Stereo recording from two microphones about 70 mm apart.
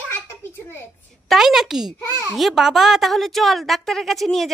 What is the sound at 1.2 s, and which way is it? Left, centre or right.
A woman's voice, centre.